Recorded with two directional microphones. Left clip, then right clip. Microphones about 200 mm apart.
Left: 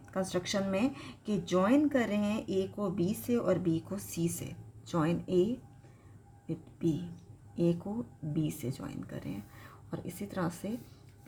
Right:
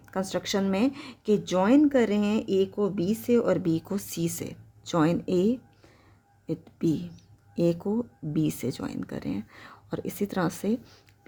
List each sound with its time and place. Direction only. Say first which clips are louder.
0.1 s a woman's voice: right 5 dB; 55° right (ahead or behind)